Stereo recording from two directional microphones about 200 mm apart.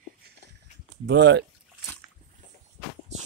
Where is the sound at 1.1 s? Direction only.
60° right (ahead or behind).